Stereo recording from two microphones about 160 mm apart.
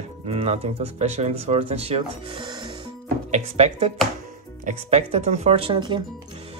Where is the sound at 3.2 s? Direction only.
45° right (ahead or behind); by 6.0 s 30° right (ahead or behind).